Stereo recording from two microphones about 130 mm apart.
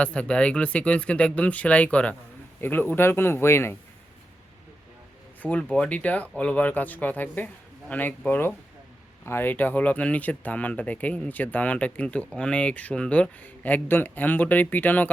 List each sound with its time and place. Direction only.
0.0 s speech: 10° left (ahead or behind)
5.4 s speech: 10° left (ahead or behind)